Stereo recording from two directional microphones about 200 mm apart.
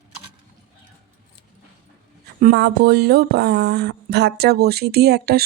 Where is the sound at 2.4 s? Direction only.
50° right (ahead or behind).